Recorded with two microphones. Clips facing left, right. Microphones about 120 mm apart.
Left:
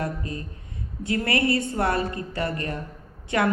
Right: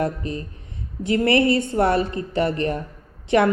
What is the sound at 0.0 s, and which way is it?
A woman's voice, 25° right (ahead or behind).